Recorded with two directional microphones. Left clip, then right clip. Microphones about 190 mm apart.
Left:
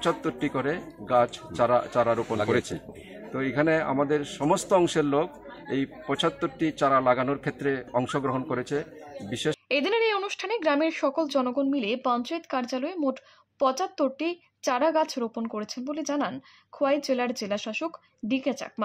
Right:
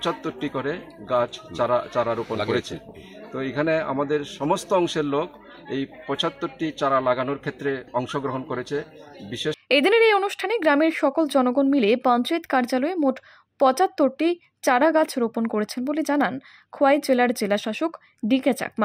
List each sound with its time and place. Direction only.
0.0 s speech: 5° left (ahead or behind)
3.3 s speech: 5° left (ahead or behind)
9.7 s speech: 25° right (ahead or behind)